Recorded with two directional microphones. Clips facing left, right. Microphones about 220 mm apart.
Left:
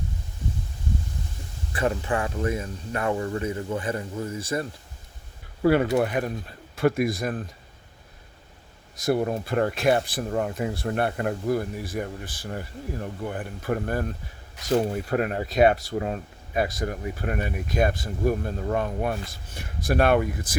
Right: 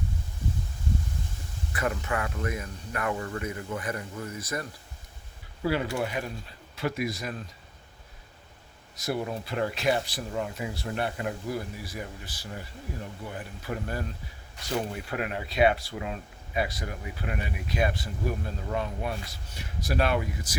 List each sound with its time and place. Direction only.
1.7 s speech: 30° left (ahead or behind)
5.6 s speech: 55° left (ahead or behind)
9.0 s speech: 50° left (ahead or behind)
15.1 s speech: 45° left (ahead or behind)